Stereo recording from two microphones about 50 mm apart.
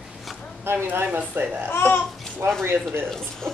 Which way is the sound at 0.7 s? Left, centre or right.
Right.